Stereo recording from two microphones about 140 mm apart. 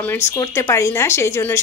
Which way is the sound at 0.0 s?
15° left (ahead or behind).